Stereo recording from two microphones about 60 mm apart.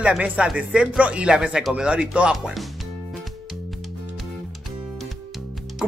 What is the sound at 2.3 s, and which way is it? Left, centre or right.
Speech, centre.